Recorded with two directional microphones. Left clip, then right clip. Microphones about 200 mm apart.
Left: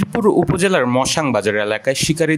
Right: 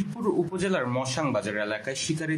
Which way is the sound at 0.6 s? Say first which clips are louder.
Left 12 dB; 55° left (ahead or behind).